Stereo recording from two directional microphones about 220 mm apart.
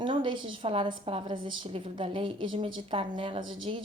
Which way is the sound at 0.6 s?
25° right (ahead or behind).